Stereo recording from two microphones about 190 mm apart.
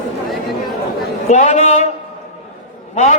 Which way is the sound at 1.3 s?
40° left (ahead or behind).